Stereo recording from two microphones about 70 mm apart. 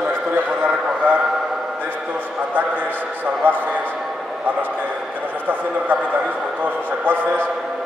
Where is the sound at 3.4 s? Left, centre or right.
Right.